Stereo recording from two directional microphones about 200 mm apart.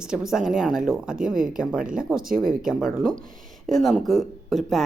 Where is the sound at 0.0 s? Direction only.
5° right (ahead or behind).